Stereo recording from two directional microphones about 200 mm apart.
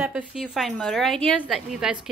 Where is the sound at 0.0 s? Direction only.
5° right (ahead or behind).